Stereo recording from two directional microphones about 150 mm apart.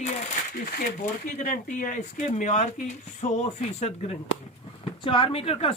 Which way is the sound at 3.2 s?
25° left (ahead or behind).